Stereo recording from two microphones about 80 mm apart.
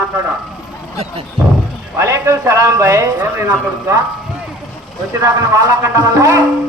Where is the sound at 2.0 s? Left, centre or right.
Right.